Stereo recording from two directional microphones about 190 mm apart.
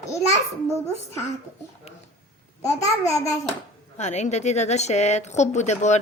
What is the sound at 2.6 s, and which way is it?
Speech, 15° left (ahead or behind).